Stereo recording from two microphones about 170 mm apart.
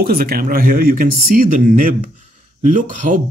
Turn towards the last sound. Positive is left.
turn(degrees=-50)  # may be behind; listen again after turning